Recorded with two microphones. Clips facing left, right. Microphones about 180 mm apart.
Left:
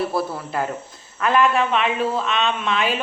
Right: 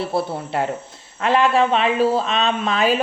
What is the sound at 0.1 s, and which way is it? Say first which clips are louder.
A woman's voice: right 2 dB; 25° right (ahead or behind).